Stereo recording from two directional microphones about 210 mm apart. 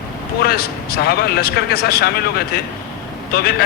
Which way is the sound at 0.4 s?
45° left (ahead or behind).